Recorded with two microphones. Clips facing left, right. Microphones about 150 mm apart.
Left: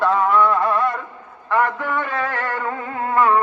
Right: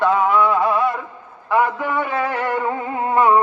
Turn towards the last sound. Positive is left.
turn(degrees=-20)  # may be behind; listen again after turning